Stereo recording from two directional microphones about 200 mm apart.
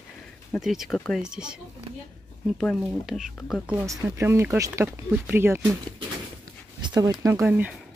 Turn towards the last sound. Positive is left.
turn(degrees=-10)  # may be behind; listen again after turning